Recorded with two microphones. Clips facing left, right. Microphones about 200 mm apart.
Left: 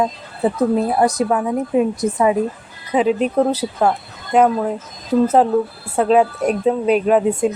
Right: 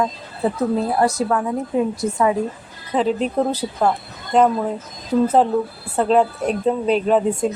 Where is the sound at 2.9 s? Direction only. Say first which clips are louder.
Left 3 dB; 10° left (ahead or behind).